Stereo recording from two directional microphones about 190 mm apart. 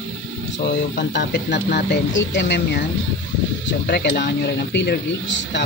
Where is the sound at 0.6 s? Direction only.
65° left (ahead or behind).